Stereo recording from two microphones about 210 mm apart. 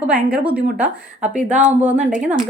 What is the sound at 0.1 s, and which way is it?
A woman's voice, 5° right (ahead or behind).